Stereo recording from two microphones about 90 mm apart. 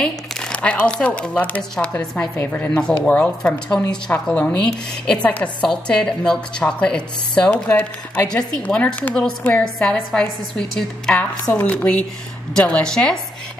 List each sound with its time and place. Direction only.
0.0 s a woman's voice: 10° left (ahead or behind)